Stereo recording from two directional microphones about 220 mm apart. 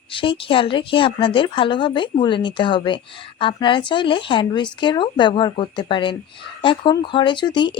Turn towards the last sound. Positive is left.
turn(degrees=20)  # may be behind; listen again after turning